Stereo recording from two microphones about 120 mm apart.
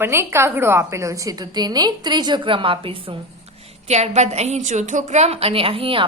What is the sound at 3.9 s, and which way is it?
A woman's voice, 70° right (ahead or behind).